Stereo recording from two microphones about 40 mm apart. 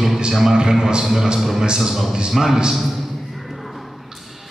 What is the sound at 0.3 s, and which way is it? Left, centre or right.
A man's voice, centre.